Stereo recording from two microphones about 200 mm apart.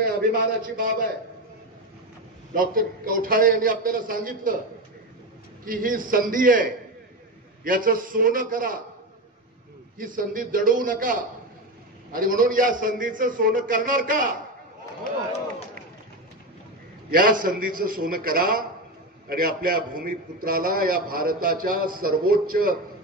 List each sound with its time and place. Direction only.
0.0 s speech: 45° right (ahead or behind)
2.5 s a man's voice: 45° right (ahead or behind)
5.7 s a man's voice: 45° right (ahead or behind)
9.9 s a man's voice: 45° right (ahead or behind)
17.1 s a man's voice: 45° right (ahead or behind)